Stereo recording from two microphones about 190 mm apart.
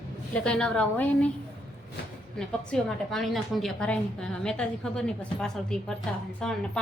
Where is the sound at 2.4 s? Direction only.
Centre (ahead or behind).